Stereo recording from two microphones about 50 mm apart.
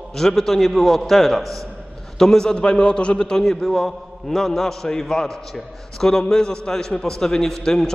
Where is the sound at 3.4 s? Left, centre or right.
Centre.